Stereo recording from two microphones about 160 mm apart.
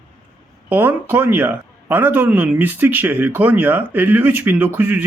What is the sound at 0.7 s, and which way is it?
A man's voice, 10° right (ahead or behind).